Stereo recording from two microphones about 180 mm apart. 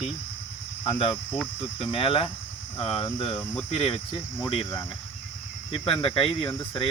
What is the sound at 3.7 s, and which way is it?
Cricket, 30° left (ahead or behind).